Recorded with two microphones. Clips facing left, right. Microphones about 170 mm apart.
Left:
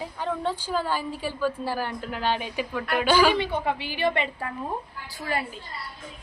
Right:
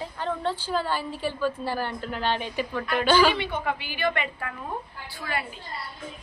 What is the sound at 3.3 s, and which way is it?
Speech, 40° left (ahead or behind).